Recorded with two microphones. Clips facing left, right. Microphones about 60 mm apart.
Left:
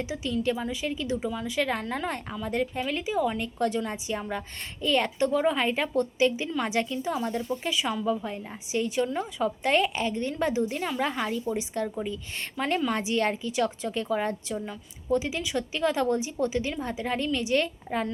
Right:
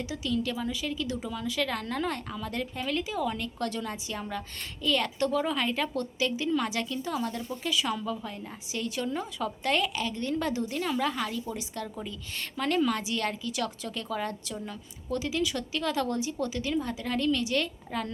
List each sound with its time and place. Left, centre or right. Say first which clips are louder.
0.0 s a woman's voice: left 2 dB; left
1.8 s a woman's voice: left 1 dB; centre